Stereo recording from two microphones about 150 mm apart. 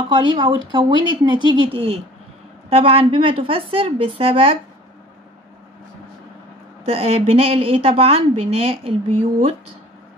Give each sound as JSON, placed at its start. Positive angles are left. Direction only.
{"t": 0.1, "sound": "speech", "side_deg": -30}
{"t": 6.9, "sound": "speech", "side_deg": -40}